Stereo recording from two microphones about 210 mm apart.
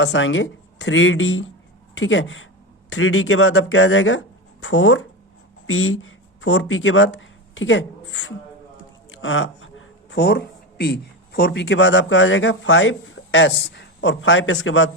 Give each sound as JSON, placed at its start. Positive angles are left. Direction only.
{"t": 0.0, "sound": "speech", "side_deg": 60}